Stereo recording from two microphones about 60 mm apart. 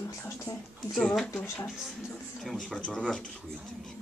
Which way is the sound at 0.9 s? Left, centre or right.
Centre.